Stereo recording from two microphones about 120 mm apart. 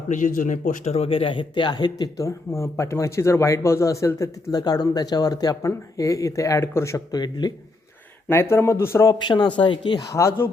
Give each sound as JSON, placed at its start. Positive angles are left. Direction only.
{"t": 0.1, "sound": "speech", "side_deg": 90}
{"t": 8.3, "sound": "speech", "side_deg": 20}
{"t": 9.1, "sound": "speech", "side_deg": 40}
{"t": 10.1, "sound": "speech", "side_deg": 25}